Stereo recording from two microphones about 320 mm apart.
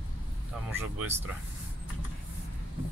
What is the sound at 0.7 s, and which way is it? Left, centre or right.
Speech, centre.